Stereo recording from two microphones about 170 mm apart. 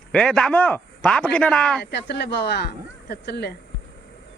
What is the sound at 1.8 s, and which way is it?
Speech, 75° left (ahead or behind).